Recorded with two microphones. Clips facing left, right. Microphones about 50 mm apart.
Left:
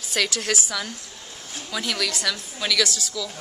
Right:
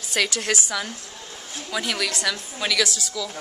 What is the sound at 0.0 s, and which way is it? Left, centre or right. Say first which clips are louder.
A woman's voice: right 1 dB; centre.